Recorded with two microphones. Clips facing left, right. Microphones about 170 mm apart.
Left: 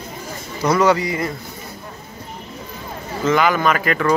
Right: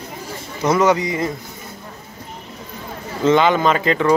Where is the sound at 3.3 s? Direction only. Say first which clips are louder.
Right 2 dB; 25° right (ahead or behind).